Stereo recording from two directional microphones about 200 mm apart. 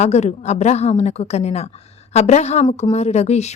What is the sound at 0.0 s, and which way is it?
A woman's voice, 35° left (ahead or behind).